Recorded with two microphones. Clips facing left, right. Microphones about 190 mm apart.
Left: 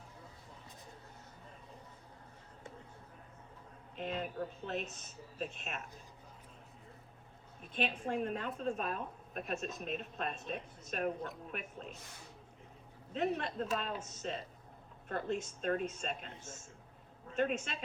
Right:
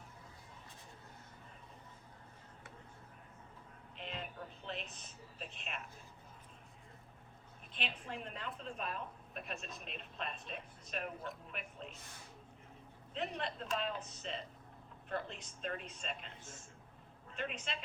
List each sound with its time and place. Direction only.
3.9 s speech: 45° left (ahead or behind)
7.7 s a woman's voice: 45° left (ahead or behind)
13.1 s a woman's voice: 50° left (ahead or behind)
17.3 s a woman's voice: 45° left (ahead or behind)